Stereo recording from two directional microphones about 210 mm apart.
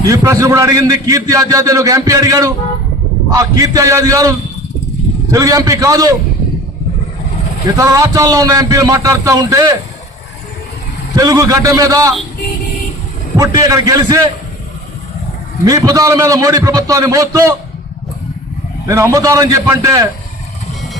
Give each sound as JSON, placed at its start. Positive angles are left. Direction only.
{"t": 0.1, "sound": "a man's voice", "side_deg": -15}
{"t": 7.8, "sound": "a man's voice", "side_deg": -15}
{"t": 11.1, "sound": "a man's voice", "side_deg": -15}
{"t": 13.3, "sound": "a man's voice", "side_deg": -15}
{"t": 15.6, "sound": "a man's voice", "side_deg": -15}
{"t": 18.9, "sound": "a man's voice", "side_deg": -15}